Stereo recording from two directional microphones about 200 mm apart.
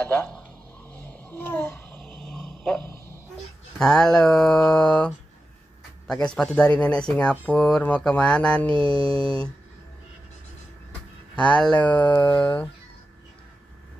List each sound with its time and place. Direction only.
0.0 s a sound: 5° left (ahead or behind)
3.7 s speech: 5° left (ahead or behind)
8.7 s mantra: 25° right (ahead or behind)
11.3 s speech: 5° left (ahead or behind)